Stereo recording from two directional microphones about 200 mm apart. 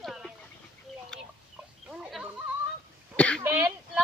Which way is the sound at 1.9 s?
Centre (ahead or behind).